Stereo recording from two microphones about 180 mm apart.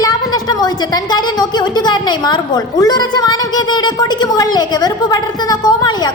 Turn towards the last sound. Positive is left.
turn(degrees=25)  # may be behind; listen again after turning